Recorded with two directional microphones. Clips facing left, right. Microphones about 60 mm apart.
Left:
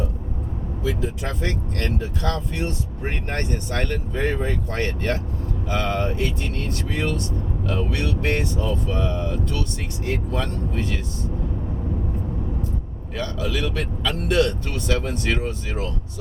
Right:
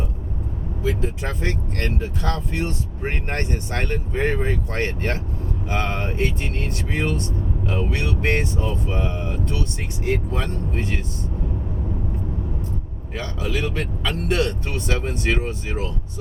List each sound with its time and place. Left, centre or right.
0.8 s speech: right
10.0 s speech: right
13.1 s speech: right